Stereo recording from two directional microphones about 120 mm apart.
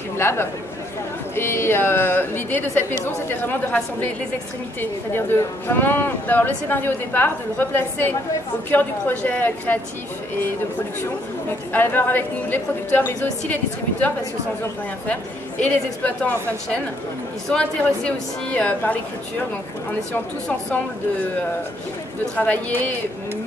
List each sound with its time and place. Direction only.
0.2 s speech: 20° left (ahead or behind)
5.1 s speech: 20° left (ahead or behind)
11.7 s speech: 15° left (ahead or behind)
15.6 s speech: 10° left (ahead or behind)
17.5 s speech: 10° left (ahead or behind)
22.3 s speech: 15° left (ahead or behind)